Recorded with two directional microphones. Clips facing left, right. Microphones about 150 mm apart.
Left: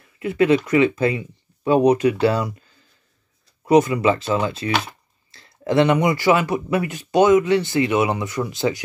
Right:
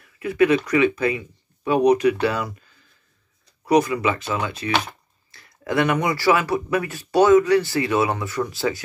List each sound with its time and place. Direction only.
0.0 s speech: 25° left (ahead or behind)